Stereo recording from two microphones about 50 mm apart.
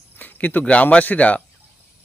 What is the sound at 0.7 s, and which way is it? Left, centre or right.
Speech, left.